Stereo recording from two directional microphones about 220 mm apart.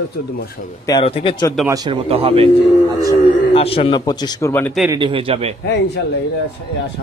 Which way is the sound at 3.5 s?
25° left (ahead or behind).